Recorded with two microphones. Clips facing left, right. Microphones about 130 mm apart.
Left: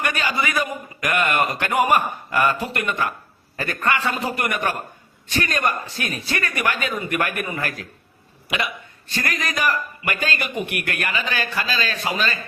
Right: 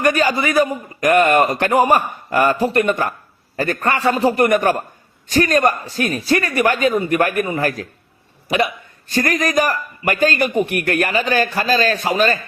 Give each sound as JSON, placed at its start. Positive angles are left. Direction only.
{"t": 0.0, "sound": "a man's voice", "side_deg": -40}